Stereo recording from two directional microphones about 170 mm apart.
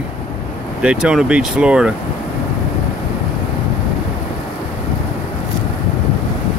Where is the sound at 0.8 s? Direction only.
5° right (ahead or behind).